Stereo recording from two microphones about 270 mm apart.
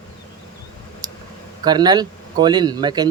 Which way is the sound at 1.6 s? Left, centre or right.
Centre.